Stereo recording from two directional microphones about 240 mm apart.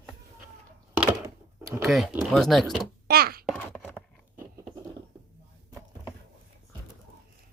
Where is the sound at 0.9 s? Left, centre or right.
Centre.